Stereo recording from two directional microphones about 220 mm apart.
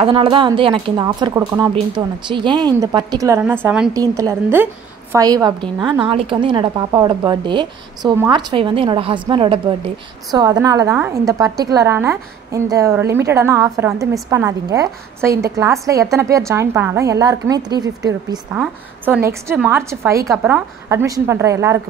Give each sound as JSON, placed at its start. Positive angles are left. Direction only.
{"t": 0.0, "sound": "speech", "side_deg": -25}
{"t": 3.9, "sound": "a woman's voice", "side_deg": -15}
{"t": 18.6, "sound": "a woman's voice", "side_deg": -5}